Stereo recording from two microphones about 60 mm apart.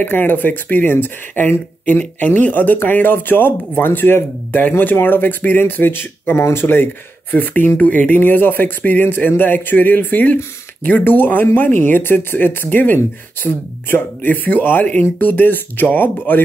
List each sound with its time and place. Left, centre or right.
0.0 s speech: left